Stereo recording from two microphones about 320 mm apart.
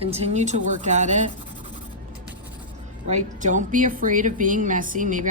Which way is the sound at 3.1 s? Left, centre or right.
Right.